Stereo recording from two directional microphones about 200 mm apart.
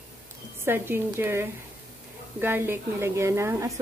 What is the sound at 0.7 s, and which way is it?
Speech, 10° right (ahead or behind).